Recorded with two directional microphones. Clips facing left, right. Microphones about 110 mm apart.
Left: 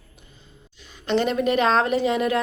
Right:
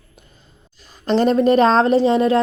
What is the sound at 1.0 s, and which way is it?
A woman's voice, 35° right (ahead or behind).